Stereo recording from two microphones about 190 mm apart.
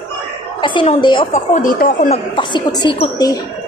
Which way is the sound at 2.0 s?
25° left (ahead or behind).